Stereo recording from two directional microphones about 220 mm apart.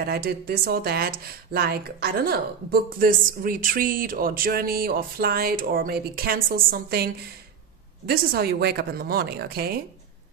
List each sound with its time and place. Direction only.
0.0 s speech: 45° right (ahead or behind)
8.1 s speech: 45° right (ahead or behind)